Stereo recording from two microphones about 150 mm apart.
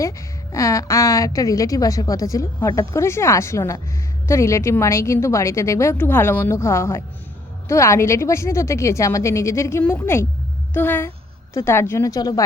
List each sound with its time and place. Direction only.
0.5 s a woman's voice: 20° left (ahead or behind)